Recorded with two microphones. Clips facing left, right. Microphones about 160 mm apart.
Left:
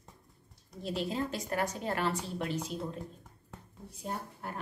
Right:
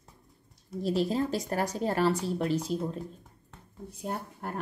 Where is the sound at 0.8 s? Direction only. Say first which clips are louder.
Right 6 dB; 35° right (ahead or behind).